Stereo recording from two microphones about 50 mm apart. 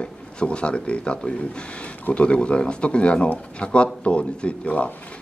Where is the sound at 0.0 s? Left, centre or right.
Left.